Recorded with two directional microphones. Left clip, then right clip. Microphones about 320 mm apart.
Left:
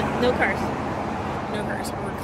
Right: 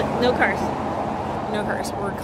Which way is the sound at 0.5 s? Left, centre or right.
Right.